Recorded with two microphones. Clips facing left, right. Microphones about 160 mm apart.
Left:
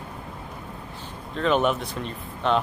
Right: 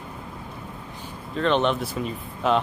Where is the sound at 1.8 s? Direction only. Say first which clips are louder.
Right 3 dB; 5° right (ahead or behind).